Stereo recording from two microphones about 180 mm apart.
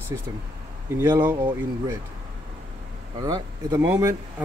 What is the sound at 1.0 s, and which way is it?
Speech, 10° right (ahead or behind).